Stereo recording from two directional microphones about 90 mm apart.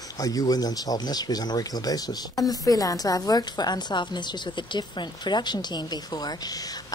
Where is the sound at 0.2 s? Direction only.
40° left (ahead or behind).